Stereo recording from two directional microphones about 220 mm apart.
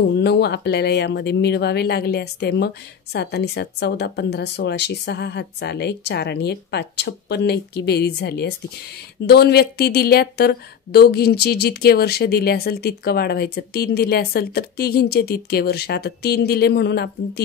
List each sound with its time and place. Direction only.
0.2 s speech: 50° left (ahead or behind)